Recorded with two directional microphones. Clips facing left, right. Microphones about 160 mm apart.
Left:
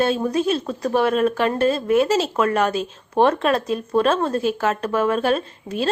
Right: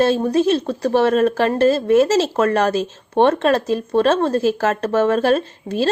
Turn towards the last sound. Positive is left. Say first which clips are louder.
# right 4 dB
turn(degrees=-35)  # may be behind; listen again after turning